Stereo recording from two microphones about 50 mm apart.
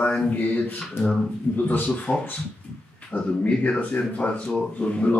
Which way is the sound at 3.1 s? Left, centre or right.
Left.